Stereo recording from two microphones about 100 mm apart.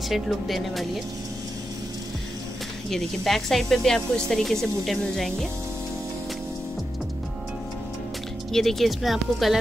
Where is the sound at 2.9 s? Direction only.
5° left (ahead or behind).